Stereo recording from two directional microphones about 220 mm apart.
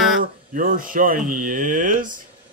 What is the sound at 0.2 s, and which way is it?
Speech, 40° right (ahead or behind).